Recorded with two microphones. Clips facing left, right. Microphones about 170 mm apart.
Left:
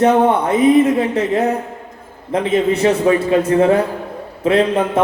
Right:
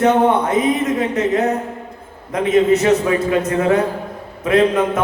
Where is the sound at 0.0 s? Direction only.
30° left (ahead or behind).